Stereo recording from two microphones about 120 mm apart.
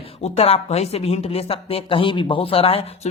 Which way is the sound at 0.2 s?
55° left (ahead or behind).